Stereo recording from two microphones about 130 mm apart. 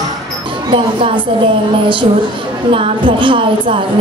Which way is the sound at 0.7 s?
40° right (ahead or behind).